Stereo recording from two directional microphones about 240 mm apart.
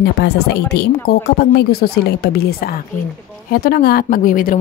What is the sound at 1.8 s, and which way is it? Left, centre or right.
Speech, left.